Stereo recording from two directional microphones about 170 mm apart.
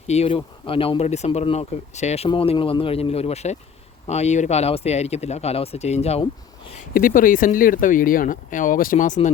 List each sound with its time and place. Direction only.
0.1 s speech: 35° left (ahead or behind)
6.9 s speech: 55° left (ahead or behind)